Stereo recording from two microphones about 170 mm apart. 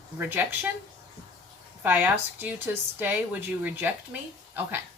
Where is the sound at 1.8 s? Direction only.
10° right (ahead or behind).